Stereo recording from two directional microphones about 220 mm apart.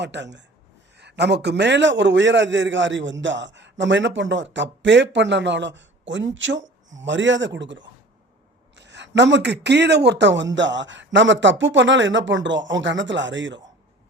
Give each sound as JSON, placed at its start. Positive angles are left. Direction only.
{"t": 0.0, "sound": "a man's voice", "side_deg": -55}